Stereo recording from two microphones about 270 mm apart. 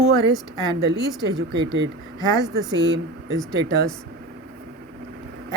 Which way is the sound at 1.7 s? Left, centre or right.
Right.